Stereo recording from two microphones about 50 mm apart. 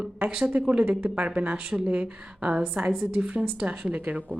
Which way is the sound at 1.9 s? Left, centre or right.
Right.